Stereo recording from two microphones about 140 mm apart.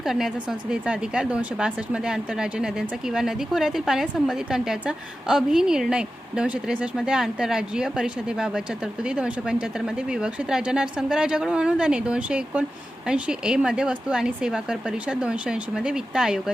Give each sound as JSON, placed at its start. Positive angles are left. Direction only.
{"t": 0.0, "sound": "speech", "side_deg": -5}